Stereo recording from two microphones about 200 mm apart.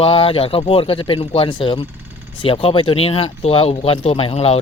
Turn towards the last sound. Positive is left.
turn(degrees=30)  # may be behind; listen again after turning